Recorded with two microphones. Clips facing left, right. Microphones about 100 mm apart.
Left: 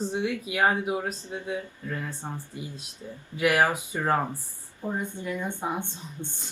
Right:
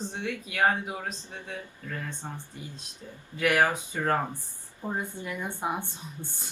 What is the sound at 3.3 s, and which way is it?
Speech, 15° left (ahead or behind).